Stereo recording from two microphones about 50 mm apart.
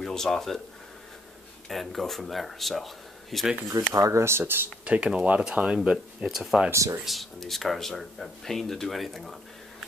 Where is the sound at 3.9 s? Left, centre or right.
Right.